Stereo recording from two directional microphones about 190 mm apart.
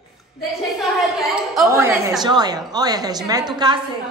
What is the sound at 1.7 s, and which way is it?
A woman's voice, 15° right (ahead or behind).